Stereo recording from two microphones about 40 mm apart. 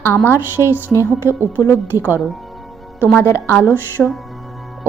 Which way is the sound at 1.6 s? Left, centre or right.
Right.